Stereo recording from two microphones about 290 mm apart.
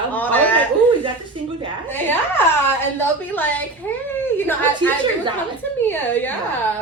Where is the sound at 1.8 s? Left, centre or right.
Centre.